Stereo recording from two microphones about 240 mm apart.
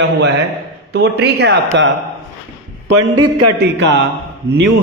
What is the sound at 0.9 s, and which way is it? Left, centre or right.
Speech, right.